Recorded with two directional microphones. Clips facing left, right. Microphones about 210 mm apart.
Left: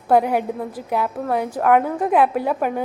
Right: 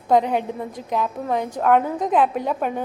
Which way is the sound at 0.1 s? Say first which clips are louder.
Left 1 dB; 5° left (ahead or behind).